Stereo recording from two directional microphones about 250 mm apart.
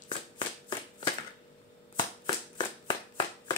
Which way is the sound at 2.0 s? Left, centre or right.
Centre.